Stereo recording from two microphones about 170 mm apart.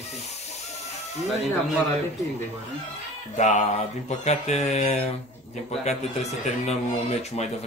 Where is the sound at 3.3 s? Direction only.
45° left (ahead or behind).